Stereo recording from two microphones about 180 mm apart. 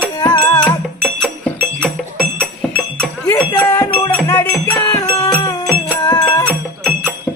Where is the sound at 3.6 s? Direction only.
10° left (ahead or behind).